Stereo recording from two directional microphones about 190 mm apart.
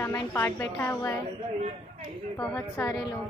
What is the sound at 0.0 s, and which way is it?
A woman's voice, 15° left (ahead or behind).